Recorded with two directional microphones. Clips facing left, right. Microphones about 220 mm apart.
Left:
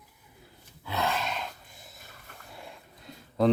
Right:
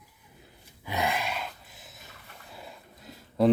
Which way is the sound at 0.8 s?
15° right (ahead or behind).